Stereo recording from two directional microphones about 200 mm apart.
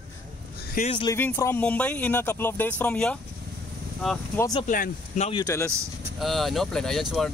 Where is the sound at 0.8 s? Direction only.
45° left (ahead or behind).